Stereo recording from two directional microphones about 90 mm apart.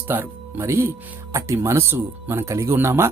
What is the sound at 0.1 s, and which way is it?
Speech, 25° right (ahead or behind).